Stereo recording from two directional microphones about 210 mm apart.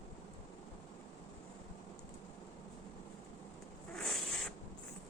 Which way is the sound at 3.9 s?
Centre (ahead or behind).